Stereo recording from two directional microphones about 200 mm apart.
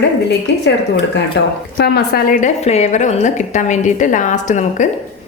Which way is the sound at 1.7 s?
55° left (ahead or behind).